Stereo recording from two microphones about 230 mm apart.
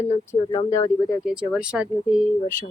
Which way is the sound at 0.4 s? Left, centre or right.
Centre.